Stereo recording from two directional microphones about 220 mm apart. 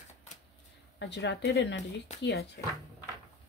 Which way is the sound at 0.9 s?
50° left (ahead or behind).